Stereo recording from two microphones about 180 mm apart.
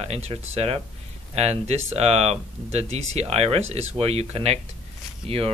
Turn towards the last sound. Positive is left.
turn(degrees=-35)  # may be behind; listen again after turning